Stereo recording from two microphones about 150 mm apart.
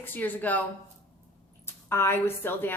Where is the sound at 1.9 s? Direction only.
15° left (ahead or behind).